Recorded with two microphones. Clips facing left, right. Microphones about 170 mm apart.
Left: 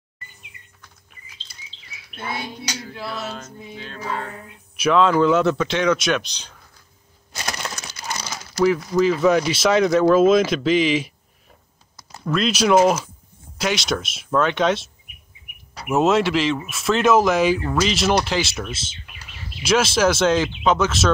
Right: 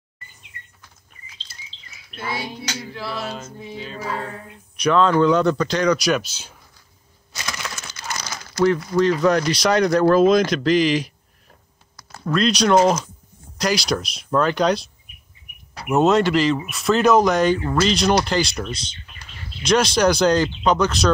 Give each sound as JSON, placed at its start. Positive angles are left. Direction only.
{"t": 1.5, "sound": "chirp", "side_deg": 0}
{"t": 3.1, "sound": "speech", "side_deg": 0}
{"t": 3.7, "sound": "music", "side_deg": -5}
{"t": 4.7, "sound": "speech", "side_deg": 5}
{"t": 7.4, "sound": "a sound", "side_deg": 40}
{"t": 8.7, "sound": "speech", "side_deg": 5}
{"t": 12.3, "sound": "speech", "side_deg": 5}
{"t": 15.9, "sound": "speech", "side_deg": 0}